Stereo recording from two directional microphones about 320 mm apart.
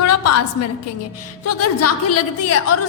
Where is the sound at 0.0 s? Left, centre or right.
Left.